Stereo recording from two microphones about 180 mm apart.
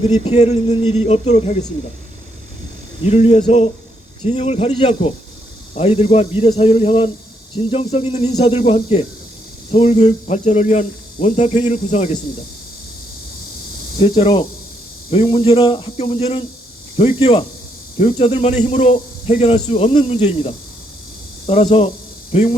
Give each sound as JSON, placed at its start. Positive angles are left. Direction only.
{"t": 0.3, "sound": "speech", "side_deg": 40}
{"t": 3.0, "sound": "speech", "side_deg": 35}
{"t": 14.0, "sound": "speech", "side_deg": 30}